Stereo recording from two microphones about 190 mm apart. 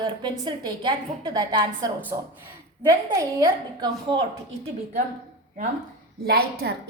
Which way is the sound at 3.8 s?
25° right (ahead or behind).